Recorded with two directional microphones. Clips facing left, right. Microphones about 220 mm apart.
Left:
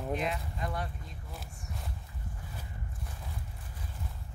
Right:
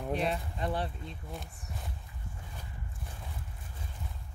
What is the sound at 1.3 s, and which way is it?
Speech, centre (ahead or behind).